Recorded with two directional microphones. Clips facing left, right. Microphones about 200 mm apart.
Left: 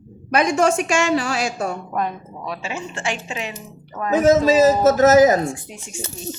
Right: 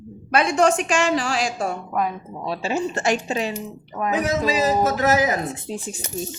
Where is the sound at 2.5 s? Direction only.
35° right (ahead or behind).